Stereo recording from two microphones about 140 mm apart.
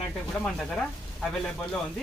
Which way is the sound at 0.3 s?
5° left (ahead or behind).